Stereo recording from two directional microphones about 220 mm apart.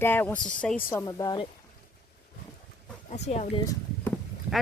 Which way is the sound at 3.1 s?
30° left (ahead or behind).